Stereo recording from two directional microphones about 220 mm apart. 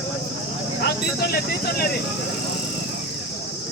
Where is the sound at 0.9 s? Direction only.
45° left (ahead or behind).